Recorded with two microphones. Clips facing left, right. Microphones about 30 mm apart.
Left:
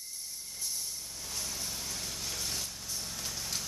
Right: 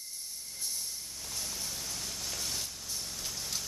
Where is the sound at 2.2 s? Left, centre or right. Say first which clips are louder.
Even; centre.